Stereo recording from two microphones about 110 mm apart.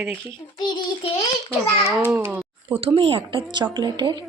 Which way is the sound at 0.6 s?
45° left (ahead or behind).